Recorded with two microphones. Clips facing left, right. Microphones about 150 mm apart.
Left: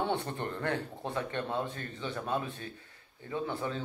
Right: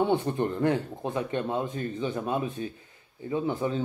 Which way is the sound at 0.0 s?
10° right (ahead or behind).